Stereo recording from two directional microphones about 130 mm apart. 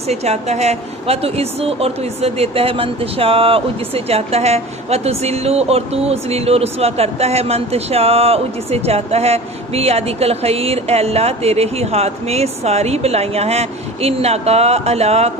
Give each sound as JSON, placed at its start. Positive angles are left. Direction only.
{"t": 0.1, "sound": "a woman's voice", "side_deg": -55}